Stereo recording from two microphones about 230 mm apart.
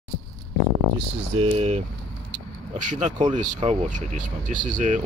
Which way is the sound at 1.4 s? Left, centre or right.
Right.